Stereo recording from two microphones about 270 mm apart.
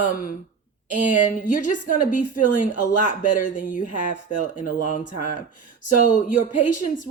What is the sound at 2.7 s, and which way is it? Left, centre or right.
Speech, left.